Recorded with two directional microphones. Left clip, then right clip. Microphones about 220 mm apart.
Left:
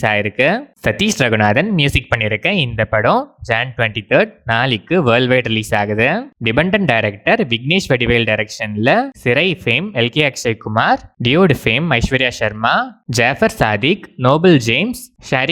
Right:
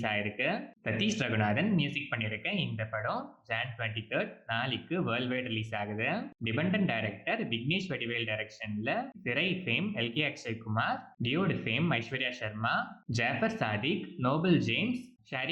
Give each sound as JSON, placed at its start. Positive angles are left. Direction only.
{"t": 0.0, "sound": "speech", "side_deg": 50}